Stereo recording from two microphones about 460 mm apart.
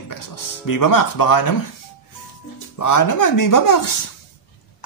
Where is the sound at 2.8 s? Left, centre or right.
Left.